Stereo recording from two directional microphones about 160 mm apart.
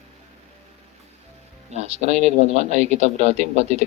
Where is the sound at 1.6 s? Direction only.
45° right (ahead or behind).